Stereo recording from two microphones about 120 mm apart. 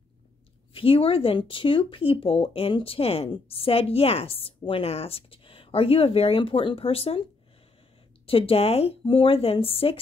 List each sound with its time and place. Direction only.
0.7 s speech: 50° left (ahead or behind)
8.3 s speech: 50° left (ahead or behind)